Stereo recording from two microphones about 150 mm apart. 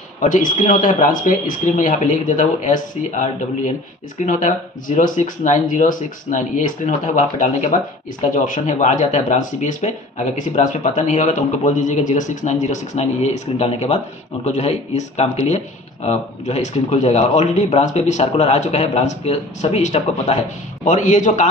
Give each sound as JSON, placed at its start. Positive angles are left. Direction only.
{"t": 0.2, "sound": "speech", "side_deg": 60}